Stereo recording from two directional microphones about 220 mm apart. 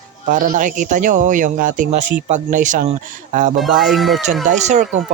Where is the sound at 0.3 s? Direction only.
35° right (ahead or behind).